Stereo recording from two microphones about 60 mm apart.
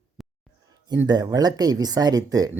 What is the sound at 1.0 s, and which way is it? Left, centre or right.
Speech, right.